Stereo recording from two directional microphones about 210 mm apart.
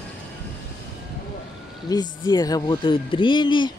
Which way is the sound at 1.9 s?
20° left (ahead or behind).